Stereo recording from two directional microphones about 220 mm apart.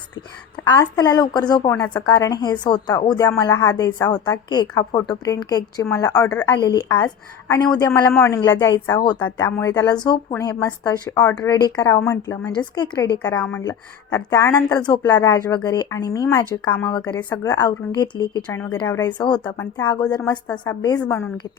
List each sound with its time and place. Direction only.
0.7 s a woman's voice: 15° left (ahead or behind)
13.2 s a woman's voice: 10° left (ahead or behind)